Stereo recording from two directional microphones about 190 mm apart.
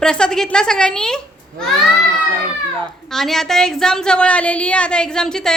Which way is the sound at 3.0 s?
Centre (ahead or behind).